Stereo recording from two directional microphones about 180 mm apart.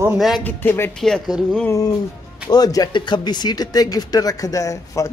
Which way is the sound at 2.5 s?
20° left (ahead or behind).